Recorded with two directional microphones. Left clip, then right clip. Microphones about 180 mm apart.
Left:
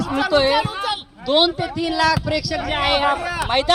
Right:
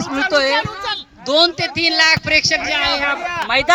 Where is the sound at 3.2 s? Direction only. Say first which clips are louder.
Right 2 dB; 60° left (ahead or behind).